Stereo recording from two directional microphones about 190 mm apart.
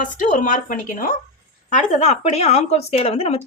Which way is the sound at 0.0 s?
40° left (ahead or behind).